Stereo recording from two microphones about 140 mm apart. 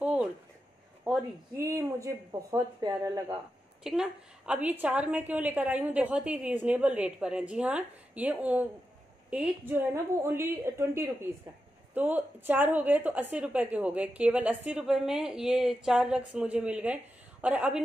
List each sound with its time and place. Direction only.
0.0 s a sound: 10° right (ahead or behind)
1.6 s speech: 20° right (ahead or behind)
3.8 s a woman's voice: 5° right (ahead or behind)